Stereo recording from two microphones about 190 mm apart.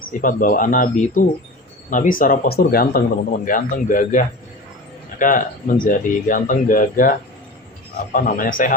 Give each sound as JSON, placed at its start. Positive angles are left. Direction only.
{"t": 0.2, "sound": "speech", "side_deg": 45}